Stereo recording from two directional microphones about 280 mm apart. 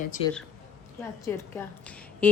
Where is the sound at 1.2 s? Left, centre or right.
Centre.